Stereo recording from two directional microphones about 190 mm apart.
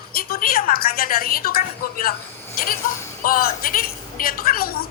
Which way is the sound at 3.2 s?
50° left (ahead or behind).